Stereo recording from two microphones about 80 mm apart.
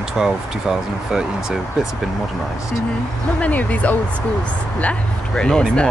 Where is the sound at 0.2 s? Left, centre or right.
Centre.